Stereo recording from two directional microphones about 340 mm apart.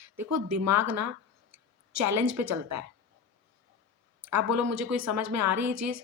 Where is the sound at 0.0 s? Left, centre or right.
Right.